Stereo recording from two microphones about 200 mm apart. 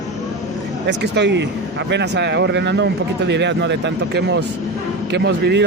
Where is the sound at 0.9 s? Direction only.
60° right (ahead or behind).